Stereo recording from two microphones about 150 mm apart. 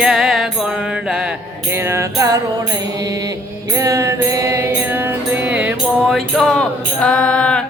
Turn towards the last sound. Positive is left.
turn(degrees=5)  # may be behind; listen again after turning